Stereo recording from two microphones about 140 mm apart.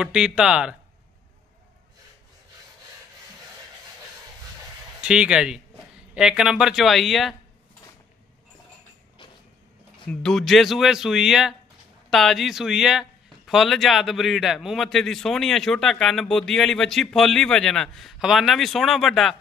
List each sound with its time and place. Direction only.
0.0 s a man's voice: 5° right (ahead or behind)
5.0 s a man's voice: 5° right (ahead or behind)
10.0 s a man's voice: 5° left (ahead or behind)